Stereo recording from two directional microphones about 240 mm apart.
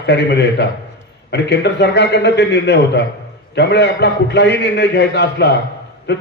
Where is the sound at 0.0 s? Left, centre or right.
Left.